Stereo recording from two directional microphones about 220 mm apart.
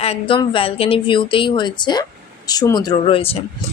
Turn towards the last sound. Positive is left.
turn(degrees=25)  # may be behind; listen again after turning